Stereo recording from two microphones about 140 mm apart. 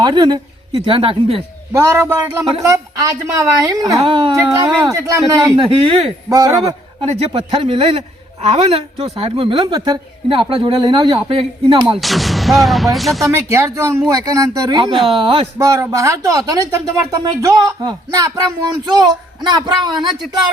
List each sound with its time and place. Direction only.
0.0 s speech: 30° right (ahead or behind)
1.7 s a woman's voice: 20° right (ahead or behind)
4.0 s a man's voice: 40° right (ahead or behind)
4.4 s a woman's voice: 25° right (ahead or behind)
5.5 s a man's voice: 40° right (ahead or behind)
6.2 s a woman's voice: 25° right (ahead or behind)
7.3 s a man's voice: 40° right (ahead or behind)
11.9 s speech: centre (ahead or behind)
13.2 s a woman's voice: 20° right (ahead or behind); by 15.4 s 40° right (ahead or behind)
15.5 s a woman's voice: 25° right (ahead or behind)